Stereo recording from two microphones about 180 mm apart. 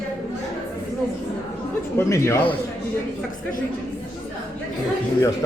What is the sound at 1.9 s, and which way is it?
Speech, 15° left (ahead or behind).